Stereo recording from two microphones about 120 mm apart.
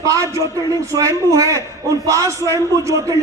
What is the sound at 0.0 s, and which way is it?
A man's voice, 25° right (ahead or behind).